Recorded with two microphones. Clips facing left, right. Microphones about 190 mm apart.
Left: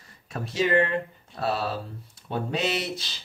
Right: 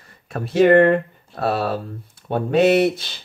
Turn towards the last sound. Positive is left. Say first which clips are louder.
# right 14 dB
turn(degrees=-55)  # may be behind; listen again after turning